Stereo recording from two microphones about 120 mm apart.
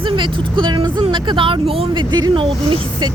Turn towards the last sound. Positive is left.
turn(degrees=-45)  # may be behind; listen again after turning